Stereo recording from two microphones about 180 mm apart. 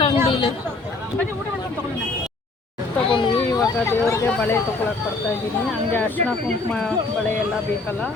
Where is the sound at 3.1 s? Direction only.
25° left (ahead or behind); by 4.6 s 10° left (ahead or behind).